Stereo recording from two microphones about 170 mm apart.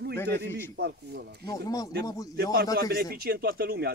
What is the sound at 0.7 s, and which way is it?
Speech, 75° right (ahead or behind).